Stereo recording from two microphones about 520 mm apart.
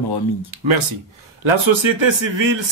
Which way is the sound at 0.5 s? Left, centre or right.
Right.